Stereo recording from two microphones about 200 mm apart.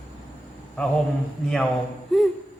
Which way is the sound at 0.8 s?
5° left (ahead or behind).